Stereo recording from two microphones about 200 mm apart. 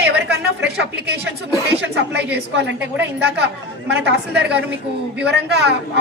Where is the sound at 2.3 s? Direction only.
60° right (ahead or behind).